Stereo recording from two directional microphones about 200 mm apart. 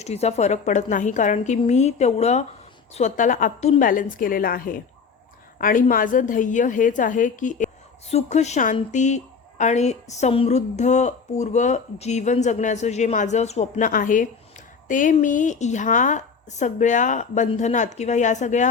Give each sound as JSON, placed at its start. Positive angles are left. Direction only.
{"t": 0.0, "sound": "a woman's voice", "side_deg": 30}